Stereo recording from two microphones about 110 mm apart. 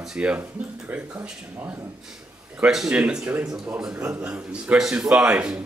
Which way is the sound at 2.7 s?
5° right (ahead or behind).